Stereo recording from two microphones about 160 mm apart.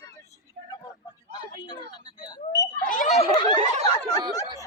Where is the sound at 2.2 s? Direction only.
25° left (ahead or behind).